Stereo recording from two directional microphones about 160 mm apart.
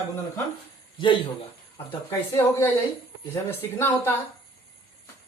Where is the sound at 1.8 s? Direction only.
15° left (ahead or behind).